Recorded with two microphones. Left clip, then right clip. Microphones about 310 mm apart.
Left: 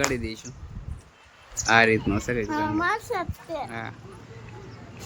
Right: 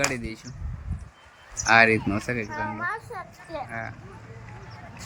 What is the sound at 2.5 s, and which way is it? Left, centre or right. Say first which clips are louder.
A child's voice: left 5 dB; left.